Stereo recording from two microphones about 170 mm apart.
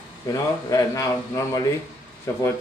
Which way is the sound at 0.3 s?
20° left (ahead or behind).